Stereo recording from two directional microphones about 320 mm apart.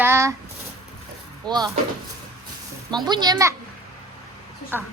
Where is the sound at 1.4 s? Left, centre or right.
Centre.